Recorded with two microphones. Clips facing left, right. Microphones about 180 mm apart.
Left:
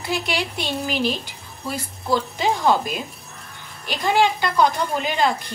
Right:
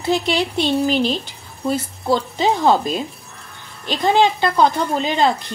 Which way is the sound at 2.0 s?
25° right (ahead or behind).